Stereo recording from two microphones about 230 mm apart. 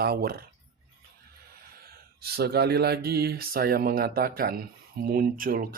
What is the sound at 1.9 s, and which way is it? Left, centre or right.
Speech, right.